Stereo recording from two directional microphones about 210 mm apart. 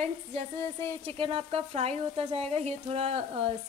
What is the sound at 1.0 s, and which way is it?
Speech, 25° right (ahead or behind).